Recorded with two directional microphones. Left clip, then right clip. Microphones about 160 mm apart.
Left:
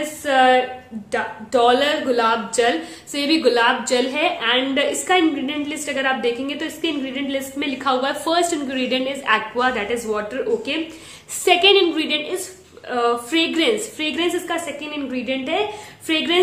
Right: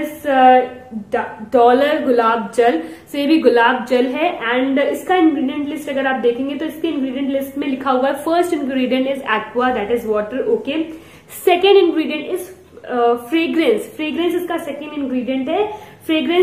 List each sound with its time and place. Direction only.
0.2 s a woman's voice: 10° left (ahead or behind)